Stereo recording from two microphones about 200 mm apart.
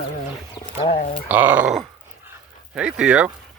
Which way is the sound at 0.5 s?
20° left (ahead or behind).